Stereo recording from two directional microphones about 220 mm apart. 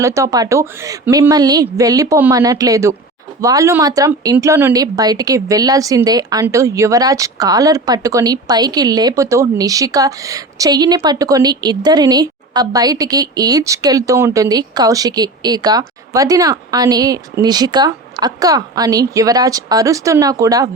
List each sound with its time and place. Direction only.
0.0 s speech: 15° right (ahead or behind)